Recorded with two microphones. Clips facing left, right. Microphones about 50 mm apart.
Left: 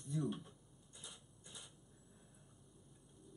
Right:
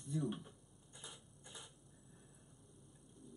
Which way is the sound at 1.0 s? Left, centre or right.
Centre.